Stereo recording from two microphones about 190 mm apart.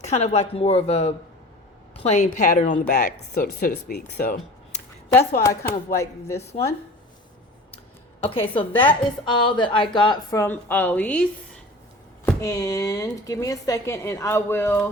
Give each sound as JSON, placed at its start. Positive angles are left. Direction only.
{"t": 0.0, "sound": "speech", "side_deg": 35}
{"t": 2.9, "sound": "speech", "side_deg": 55}
{"t": 5.4, "sound": "speech", "side_deg": 15}
{"t": 8.2, "sound": "a woman's voice", "side_deg": 30}